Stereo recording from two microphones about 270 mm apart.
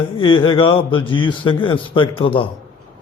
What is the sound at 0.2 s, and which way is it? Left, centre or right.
A man's voice, centre.